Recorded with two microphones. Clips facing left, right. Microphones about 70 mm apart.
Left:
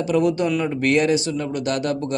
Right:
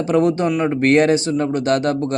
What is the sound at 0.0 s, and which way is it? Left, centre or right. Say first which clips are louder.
A man's voice: right 3 dB; right.